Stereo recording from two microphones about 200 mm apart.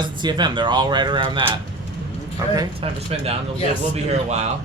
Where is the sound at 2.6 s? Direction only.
30° right (ahead or behind).